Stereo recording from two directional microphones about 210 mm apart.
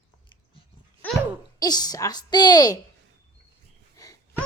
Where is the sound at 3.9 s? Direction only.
15° left (ahead or behind).